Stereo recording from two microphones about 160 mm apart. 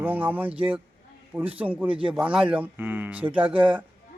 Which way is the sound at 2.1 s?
5° right (ahead or behind).